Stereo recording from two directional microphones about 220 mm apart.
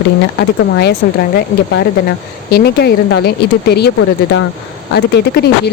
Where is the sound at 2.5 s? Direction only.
45° left (ahead or behind).